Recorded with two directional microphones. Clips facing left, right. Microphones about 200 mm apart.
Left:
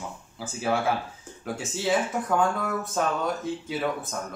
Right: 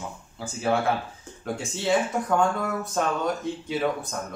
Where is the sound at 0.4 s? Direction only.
5° left (ahead or behind).